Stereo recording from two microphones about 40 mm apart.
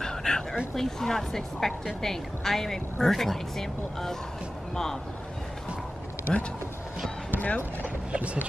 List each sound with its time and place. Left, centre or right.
0.0 s a sound: centre
0.7 s a woman's voice: centre
6.3 s speech: centre
7.3 s speech: left
7.8 s speech: right